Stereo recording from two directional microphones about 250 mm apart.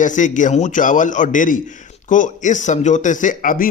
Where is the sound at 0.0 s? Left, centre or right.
Left.